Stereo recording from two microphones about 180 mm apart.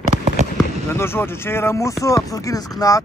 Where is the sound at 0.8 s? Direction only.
15° left (ahead or behind).